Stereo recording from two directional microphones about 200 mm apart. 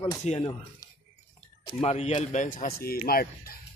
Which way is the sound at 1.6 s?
30° left (ahead or behind).